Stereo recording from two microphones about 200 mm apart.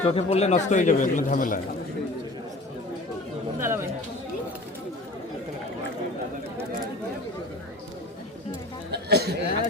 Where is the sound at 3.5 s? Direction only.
15° right (ahead or behind).